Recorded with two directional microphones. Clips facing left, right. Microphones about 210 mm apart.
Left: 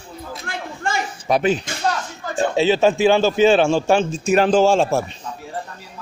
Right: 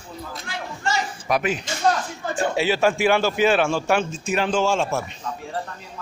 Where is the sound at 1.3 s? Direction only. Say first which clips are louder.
Left 5 dB; 30° left (ahead or behind).